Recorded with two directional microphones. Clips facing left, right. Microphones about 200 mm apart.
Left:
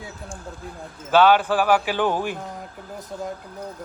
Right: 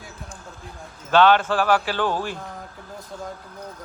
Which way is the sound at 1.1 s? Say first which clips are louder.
Even; 10° left (ahead or behind).